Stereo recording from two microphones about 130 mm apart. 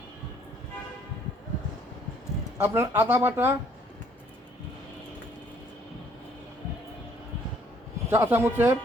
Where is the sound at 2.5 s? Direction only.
20° right (ahead or behind).